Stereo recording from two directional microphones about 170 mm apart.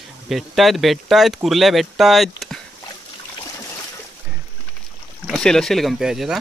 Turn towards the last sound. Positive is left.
turn(degrees=0)  # may be behind; listen again after turning